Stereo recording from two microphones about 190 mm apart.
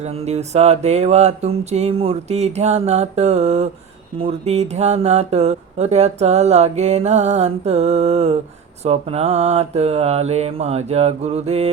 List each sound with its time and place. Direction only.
0.0 s speech: 35° right (ahead or behind)